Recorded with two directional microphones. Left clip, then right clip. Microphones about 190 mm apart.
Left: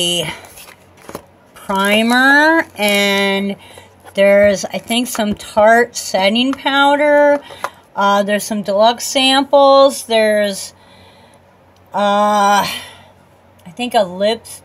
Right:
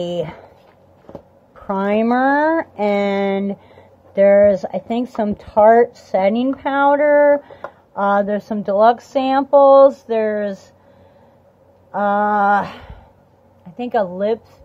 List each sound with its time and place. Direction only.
0.0 s speech: centre (ahead or behind)
1.5 s speech: centre (ahead or behind)
11.9 s speech: 5° left (ahead or behind)